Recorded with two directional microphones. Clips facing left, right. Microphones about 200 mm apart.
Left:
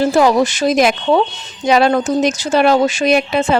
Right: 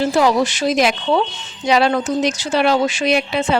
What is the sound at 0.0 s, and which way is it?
Speech, 50° left (ahead or behind).